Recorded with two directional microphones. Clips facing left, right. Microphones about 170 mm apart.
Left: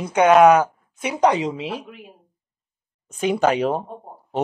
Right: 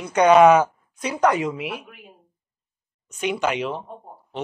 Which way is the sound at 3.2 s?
35° left (ahead or behind).